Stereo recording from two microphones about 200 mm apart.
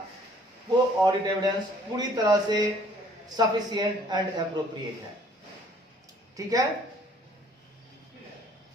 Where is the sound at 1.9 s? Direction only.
20° right (ahead or behind).